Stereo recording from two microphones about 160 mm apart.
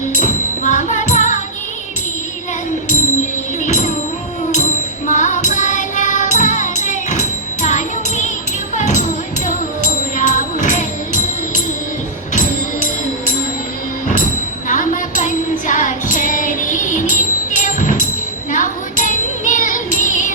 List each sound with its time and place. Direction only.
0.1 s music: 50° left (ahead or behind)
3.6 s music: 50° left (ahead or behind)
5.0 s music: 50° left (ahead or behind)
14.7 s music: 55° left (ahead or behind)
18.5 s child singing: 55° left (ahead or behind)